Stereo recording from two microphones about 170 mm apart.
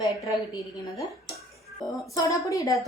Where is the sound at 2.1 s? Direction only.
20° left (ahead or behind).